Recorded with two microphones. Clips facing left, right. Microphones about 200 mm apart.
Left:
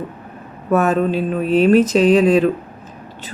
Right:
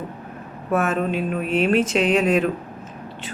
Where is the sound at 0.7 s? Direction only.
40° left (ahead or behind).